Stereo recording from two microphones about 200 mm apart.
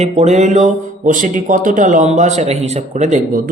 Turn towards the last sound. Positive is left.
turn(degrees=-40)  # may be behind; listen again after turning